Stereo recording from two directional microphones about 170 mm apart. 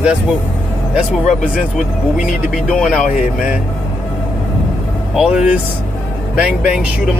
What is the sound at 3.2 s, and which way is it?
Speech, 50° left (ahead or behind).